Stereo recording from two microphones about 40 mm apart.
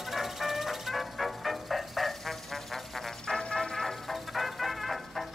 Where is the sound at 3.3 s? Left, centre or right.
Left.